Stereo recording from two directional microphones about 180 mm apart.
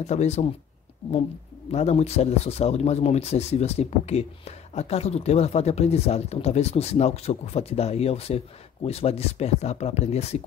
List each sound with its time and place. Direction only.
0.0 s speech: 40° left (ahead or behind)
1.7 s speech: 35° left (ahead or behind)